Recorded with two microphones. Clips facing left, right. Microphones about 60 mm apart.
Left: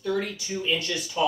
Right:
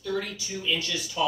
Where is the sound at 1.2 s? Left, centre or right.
Centre.